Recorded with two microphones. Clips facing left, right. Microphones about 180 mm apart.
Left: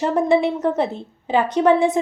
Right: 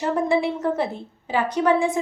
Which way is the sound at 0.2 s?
20° left (ahead or behind).